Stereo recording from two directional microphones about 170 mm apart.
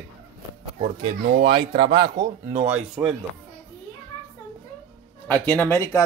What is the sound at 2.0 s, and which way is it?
Speech, 50° right (ahead or behind).